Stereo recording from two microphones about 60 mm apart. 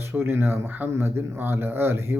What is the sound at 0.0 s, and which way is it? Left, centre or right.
Speech, right.